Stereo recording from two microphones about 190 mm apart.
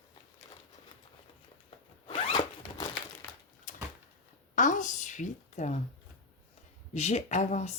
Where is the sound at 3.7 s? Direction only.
45° left (ahead or behind).